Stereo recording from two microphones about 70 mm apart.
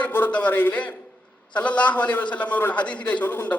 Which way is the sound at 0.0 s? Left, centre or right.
Left.